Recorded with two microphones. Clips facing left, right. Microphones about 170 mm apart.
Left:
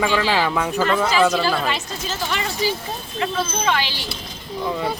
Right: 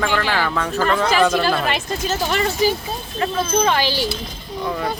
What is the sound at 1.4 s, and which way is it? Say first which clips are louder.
Speech: right 2 dB; 55° right (ahead or behind).